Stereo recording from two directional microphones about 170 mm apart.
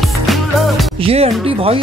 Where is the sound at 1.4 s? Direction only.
35° right (ahead or behind).